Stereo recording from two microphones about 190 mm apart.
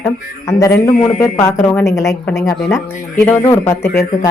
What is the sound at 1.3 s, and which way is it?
Speech, 15° left (ahead or behind).